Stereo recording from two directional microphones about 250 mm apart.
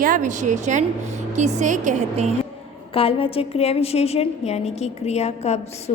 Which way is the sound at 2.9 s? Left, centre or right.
Left.